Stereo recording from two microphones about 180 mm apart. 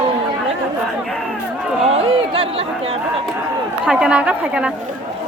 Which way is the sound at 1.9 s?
30° right (ahead or behind).